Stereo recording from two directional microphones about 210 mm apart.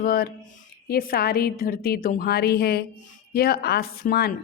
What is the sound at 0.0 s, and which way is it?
A woman's voice, 45° left (ahead or behind).